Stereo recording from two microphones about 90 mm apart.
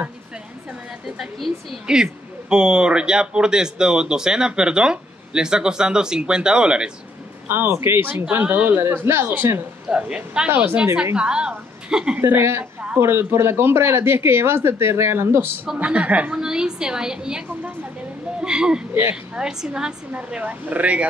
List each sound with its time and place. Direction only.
1.0 s a woman's voice: 5° right (ahead or behind)
7.4 s speech: 25° right (ahead or behind)
9.8 s speech: 10° right (ahead or behind)
12.2 s speech: 25° right (ahead or behind)
15.8 s speech: 15° right (ahead or behind)